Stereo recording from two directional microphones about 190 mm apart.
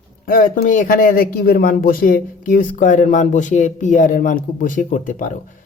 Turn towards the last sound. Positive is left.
turn(degrees=45)  # may be behind; listen again after turning